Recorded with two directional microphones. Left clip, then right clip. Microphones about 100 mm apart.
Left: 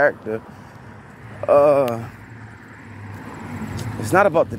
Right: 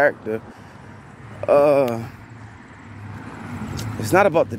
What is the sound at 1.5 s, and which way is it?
Speech, 65° right (ahead or behind).